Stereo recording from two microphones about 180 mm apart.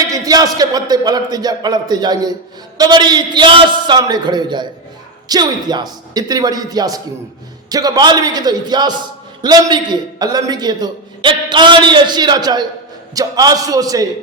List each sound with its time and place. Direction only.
0.1 s a man's voice: 20° right (ahead or behind)